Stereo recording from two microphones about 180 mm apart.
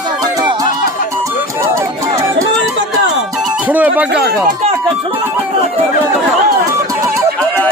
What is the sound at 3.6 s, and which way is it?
Music, 10° right (ahead or behind).